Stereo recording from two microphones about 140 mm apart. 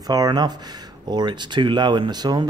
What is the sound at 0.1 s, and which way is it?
Speech, 30° right (ahead or behind).